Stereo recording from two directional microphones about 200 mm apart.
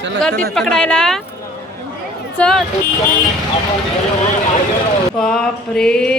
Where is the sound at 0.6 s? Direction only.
5° left (ahead or behind).